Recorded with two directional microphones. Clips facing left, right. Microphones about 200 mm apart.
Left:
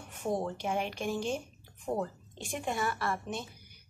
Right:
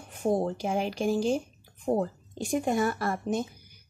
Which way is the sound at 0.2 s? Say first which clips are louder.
Right 6 dB; 35° right (ahead or behind).